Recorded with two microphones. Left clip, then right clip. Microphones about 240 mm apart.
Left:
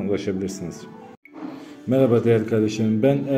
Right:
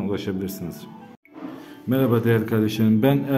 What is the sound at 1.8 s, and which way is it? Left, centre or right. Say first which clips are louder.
A man's voice: left 3 dB; centre.